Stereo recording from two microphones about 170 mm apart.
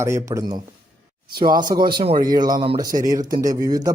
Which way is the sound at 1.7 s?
25° right (ahead or behind).